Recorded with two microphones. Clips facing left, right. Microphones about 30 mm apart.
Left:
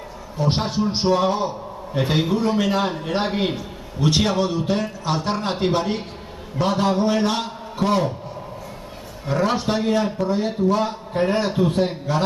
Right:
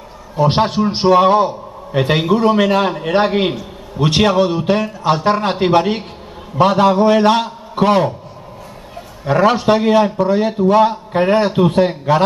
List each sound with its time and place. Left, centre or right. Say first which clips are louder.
0.4 s a man's voice: right 8 dB; right
2.0 s a man's voice: right 7 dB; right
3.3 s music: right 6 dB; right
5.4 s a man's voice: right 8 dB; right
9.2 s a man's voice: right 8 dB; right